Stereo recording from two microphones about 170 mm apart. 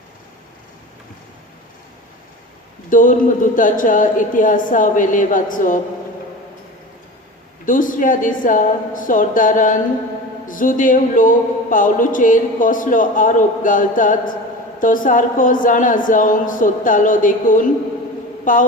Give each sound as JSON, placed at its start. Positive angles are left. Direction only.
{"t": 2.9, "sound": "speech", "side_deg": 50}
{"t": 7.6, "sound": "speech", "side_deg": 50}